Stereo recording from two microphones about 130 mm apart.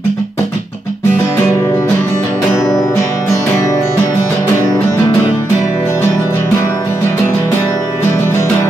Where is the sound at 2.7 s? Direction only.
30° left (ahead or behind).